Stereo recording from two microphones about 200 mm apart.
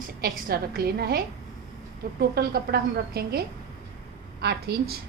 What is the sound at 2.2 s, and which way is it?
A woman's voice, 50° right (ahead or behind).